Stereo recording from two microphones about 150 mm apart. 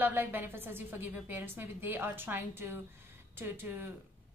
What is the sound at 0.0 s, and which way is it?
A woman's voice, 15° right (ahead or behind).